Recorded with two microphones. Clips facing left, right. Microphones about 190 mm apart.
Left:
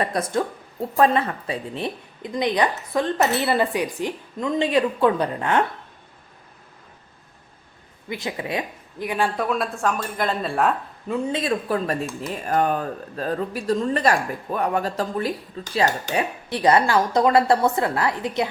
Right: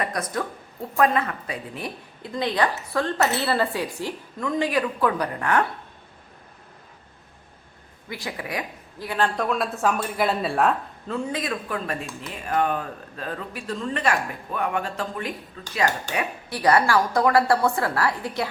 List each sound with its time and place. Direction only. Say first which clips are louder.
0.0 s a woman's voice: left 4 dB; 30° left (ahead or behind)
8.1 s a woman's voice: left 4 dB; 25° left (ahead or behind); by 10.8 s centre (ahead or behind)
11.1 s a woman's voice: left 4 dB; 25° left (ahead or behind)